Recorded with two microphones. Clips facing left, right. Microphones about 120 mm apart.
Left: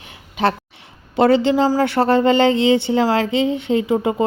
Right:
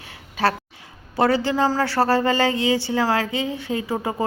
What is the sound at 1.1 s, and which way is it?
Speech, 25° left (ahead or behind).